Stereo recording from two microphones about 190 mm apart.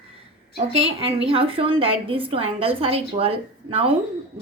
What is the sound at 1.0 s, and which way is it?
A woman's voice, 30° right (ahead or behind).